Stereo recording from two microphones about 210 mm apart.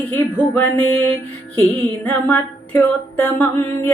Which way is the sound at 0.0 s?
10° left (ahead or behind).